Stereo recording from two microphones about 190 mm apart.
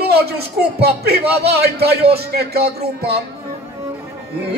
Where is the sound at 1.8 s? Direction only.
55° right (ahead or behind).